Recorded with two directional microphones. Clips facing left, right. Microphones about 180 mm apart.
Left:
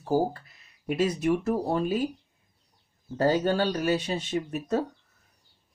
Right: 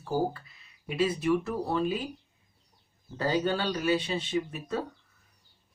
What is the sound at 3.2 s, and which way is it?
Speech, 45° left (ahead or behind).